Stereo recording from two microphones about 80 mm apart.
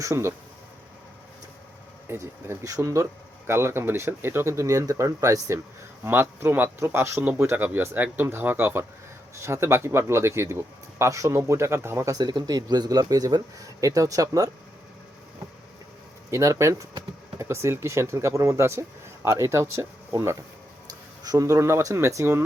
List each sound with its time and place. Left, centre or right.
0.0 s speech: right
2.0 s speech: right
2.6 s speech: right
6.1 s speech: right
12.1 s speech: right
16.3 s speech: right